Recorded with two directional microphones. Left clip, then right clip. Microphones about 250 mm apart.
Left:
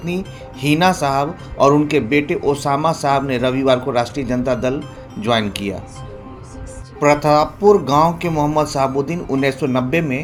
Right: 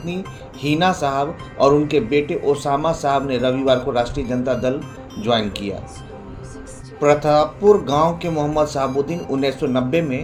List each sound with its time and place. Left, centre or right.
0.0 s speech: left
7.0 s speech: left